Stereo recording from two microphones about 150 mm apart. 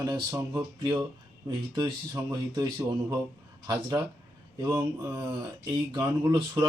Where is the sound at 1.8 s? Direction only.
25° right (ahead or behind).